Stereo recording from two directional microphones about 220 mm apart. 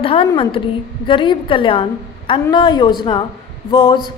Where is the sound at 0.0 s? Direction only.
25° left (ahead or behind).